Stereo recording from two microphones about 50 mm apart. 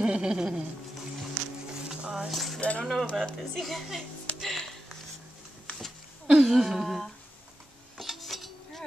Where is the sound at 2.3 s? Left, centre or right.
Centre.